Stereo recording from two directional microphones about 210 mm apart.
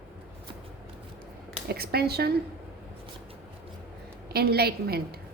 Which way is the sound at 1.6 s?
50° right (ahead or behind).